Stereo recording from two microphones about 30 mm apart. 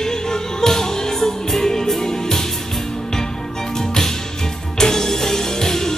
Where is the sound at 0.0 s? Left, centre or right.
Centre.